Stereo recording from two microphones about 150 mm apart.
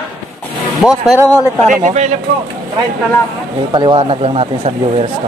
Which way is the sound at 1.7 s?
55° right (ahead or behind).